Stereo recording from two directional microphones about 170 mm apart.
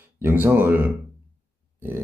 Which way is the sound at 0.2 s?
10° right (ahead or behind).